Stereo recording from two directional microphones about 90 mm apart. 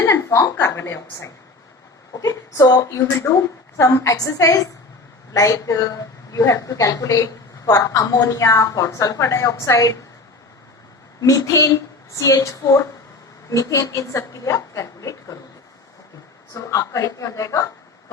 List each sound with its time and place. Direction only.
0.0 s a woman's voice: 30° left (ahead or behind)
2.2 s a woman's voice: 40° left (ahead or behind)
3.0 s a woman's voice: 30° left (ahead or behind)
11.2 s a woman's voice: 40° left (ahead or behind)
16.6 s a woman's voice: 40° left (ahead or behind)